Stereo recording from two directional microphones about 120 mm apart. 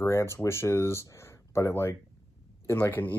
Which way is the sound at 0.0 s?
25° left (ahead or behind).